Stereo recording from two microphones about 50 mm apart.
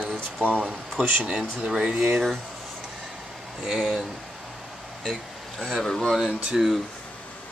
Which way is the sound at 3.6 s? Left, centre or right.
Centre.